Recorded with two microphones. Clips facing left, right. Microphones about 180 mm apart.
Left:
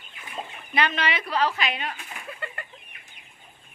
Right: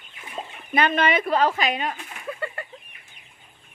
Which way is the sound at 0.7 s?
50° right (ahead or behind).